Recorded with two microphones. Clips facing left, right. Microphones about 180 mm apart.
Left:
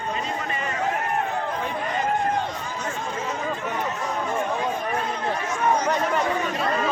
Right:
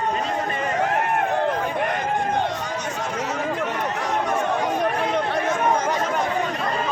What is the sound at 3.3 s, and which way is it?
Chatter, 80° right.